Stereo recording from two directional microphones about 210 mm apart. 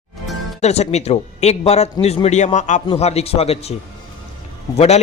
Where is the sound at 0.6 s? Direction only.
30° left (ahead or behind).